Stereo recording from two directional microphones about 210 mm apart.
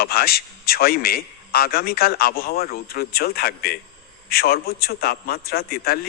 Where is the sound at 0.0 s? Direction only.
45° left (ahead or behind).